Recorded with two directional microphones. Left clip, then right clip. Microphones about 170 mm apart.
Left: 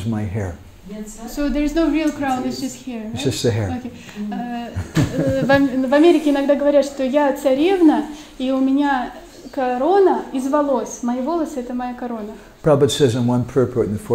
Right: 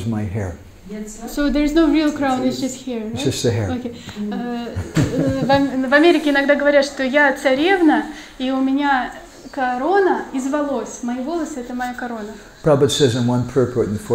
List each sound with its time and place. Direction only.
0.1 s a woman's voice: centre (ahead or behind)
5.3 s a woman's voice: 25° left (ahead or behind); by 11.3 s 5° left (ahead or behind)
12.6 s a woman's voice: centre (ahead or behind)